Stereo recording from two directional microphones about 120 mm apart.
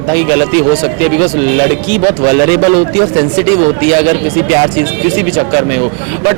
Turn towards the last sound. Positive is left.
turn(degrees=-20)  # may be behind; listen again after turning